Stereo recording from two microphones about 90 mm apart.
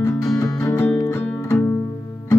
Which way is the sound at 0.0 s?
30° left (ahead or behind).